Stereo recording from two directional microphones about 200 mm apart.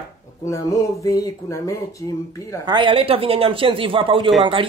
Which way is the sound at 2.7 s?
25° right (ahead or behind).